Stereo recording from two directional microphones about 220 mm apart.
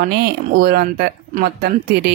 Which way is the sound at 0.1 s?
45° right (ahead or behind).